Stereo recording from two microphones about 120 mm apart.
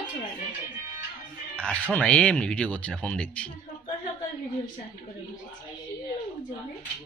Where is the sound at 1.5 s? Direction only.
10° left (ahead or behind).